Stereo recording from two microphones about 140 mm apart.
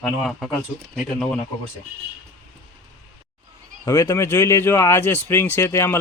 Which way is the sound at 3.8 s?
25° left (ahead or behind).